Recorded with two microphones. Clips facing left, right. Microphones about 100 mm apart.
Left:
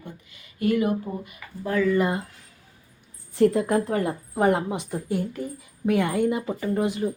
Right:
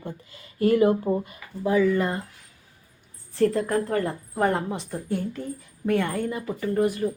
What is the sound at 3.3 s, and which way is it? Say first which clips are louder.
A woman's voice: left 2 dB; 15° left (ahead or behind).